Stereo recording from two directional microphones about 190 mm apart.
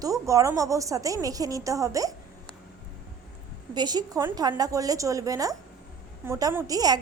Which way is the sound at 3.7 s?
20° right (ahead or behind).